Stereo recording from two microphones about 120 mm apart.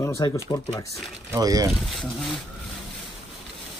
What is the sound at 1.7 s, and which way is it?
Speech, 5° left (ahead or behind).